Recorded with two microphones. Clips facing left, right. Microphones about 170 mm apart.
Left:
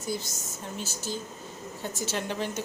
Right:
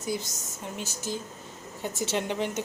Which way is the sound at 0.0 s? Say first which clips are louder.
Right 1 dB; 20° right (ahead or behind).